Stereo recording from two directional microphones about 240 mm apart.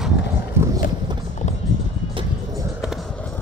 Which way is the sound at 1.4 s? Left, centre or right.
Left.